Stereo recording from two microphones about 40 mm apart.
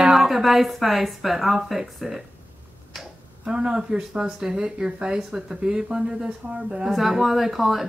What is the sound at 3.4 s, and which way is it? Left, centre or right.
Speech, right.